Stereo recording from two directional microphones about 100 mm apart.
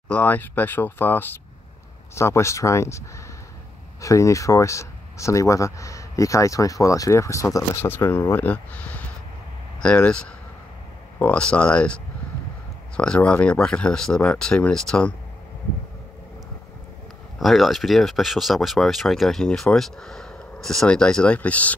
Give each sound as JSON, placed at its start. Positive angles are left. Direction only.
{"t": 0.1, "sound": "speech", "side_deg": 20}
{"t": 4.0, "sound": "speech", "side_deg": 30}
{"t": 17.4, "sound": "speech", "side_deg": 0}